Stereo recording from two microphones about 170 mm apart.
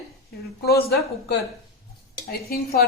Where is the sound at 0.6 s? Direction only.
70° left (ahead or behind).